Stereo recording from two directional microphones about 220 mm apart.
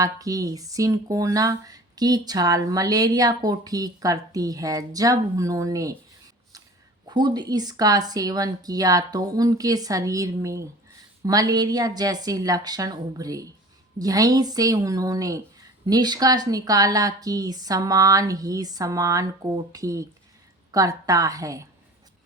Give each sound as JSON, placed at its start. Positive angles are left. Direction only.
{"t": 0.0, "sound": "speech", "side_deg": -15}
{"t": 7.1, "sound": "speech", "side_deg": -20}